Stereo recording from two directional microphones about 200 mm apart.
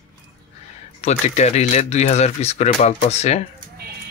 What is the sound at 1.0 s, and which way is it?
Speech, 35° left (ahead or behind).